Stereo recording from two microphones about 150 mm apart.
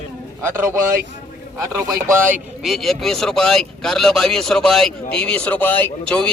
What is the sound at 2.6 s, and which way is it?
Speech, centre (ahead or behind).